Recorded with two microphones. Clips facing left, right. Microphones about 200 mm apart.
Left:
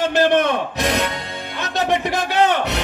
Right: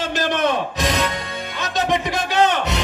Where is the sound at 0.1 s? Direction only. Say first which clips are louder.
Left 2 dB; 55° left (ahead or behind).